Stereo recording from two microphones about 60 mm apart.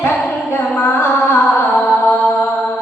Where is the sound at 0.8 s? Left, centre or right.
Left.